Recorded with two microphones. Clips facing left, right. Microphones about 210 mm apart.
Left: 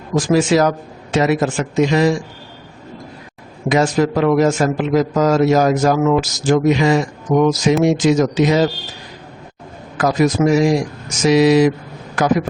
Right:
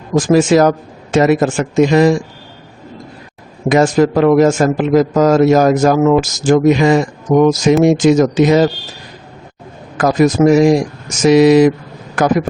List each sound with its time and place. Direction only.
0.2 s a man's voice: 45° right (ahead or behind)
3.7 s a man's voice: 50° right (ahead or behind)
10.0 s a man's voice: 50° right (ahead or behind)